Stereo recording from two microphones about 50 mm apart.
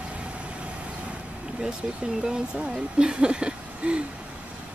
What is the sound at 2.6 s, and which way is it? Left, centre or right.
Speech, centre.